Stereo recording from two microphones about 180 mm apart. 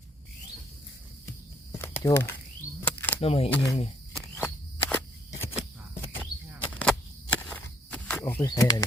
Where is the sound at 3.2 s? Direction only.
35° left (ahead or behind).